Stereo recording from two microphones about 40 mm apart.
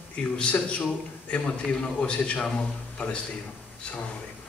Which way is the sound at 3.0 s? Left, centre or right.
Left.